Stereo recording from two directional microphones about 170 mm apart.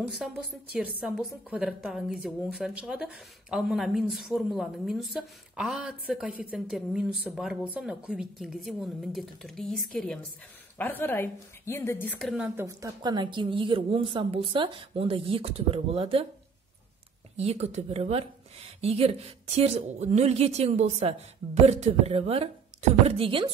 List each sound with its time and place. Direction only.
0.1 s a woman's voice: centre (ahead or behind)
12.5 s speech: 20° right (ahead or behind); by 16.3 s 35° right (ahead or behind)
17.4 s speech: 40° right (ahead or behind)